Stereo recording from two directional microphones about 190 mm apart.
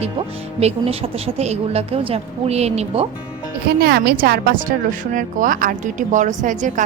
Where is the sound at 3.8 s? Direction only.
55° right (ahead or behind).